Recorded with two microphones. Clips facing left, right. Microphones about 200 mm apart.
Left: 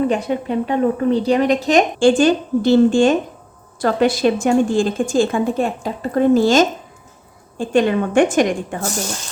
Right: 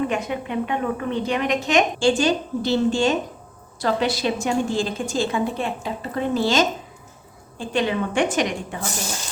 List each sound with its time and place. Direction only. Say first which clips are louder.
0.1 s a woman's voice: left 6 dB; 35° left (ahead or behind)
2.0 s a woman's voice: left 6 dB; 50° left (ahead or behind)
7.7 s a woman's voice: left 7 dB; 50° left (ahead or behind)